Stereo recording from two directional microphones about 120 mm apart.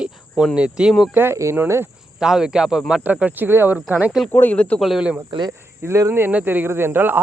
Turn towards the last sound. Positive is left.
turn(degrees=-15)  # may be behind; listen again after turning